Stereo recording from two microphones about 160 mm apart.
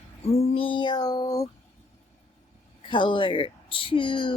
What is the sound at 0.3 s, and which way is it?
Child singing, 40° left (ahead or behind).